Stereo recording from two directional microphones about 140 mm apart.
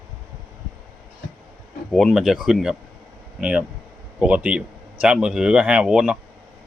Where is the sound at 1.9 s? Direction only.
Centre (ahead or behind).